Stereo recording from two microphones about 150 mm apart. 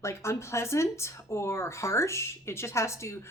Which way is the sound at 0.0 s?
20° left (ahead or behind).